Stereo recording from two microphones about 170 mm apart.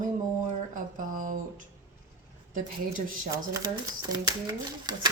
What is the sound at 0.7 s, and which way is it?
Speech, 50° right (ahead or behind).